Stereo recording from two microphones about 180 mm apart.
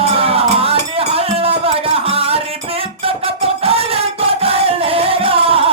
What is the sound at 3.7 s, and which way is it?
Music, 30° right (ahead or behind).